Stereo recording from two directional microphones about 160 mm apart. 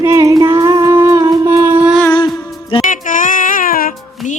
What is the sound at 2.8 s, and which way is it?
Music, 55° left (ahead or behind).